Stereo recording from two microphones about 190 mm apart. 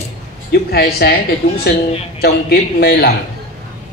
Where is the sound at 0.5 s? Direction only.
55° left (ahead or behind).